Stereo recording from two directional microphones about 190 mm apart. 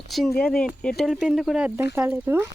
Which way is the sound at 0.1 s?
Centre (ahead or behind).